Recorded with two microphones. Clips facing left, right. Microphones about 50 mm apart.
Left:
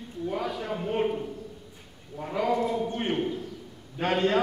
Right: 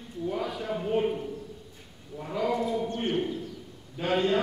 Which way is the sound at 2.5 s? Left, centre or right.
Left.